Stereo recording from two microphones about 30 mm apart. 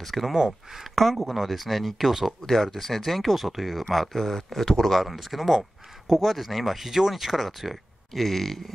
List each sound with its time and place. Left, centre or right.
0.1 s speech: centre
5.5 s speech: centre
7.4 s speech: centre